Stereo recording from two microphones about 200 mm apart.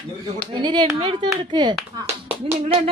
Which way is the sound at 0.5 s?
20° right (ahead or behind).